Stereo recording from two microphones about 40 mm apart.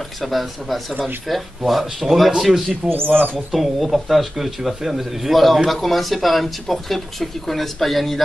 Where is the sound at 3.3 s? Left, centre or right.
Centre.